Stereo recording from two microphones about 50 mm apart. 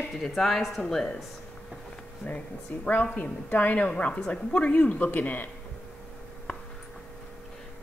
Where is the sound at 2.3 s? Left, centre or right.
Left.